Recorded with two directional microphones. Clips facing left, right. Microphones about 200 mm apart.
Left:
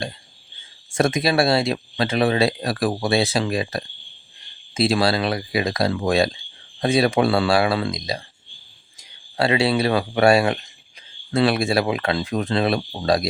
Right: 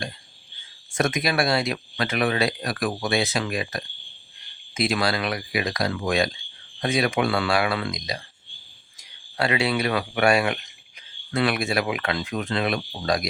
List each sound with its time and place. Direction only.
0.9 s speech: 30° left (ahead or behind)